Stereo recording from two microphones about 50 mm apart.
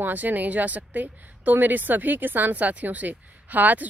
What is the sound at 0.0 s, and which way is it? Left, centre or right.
A woman's voice, right.